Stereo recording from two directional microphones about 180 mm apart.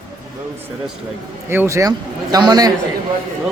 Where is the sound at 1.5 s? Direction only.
15° right (ahead or behind).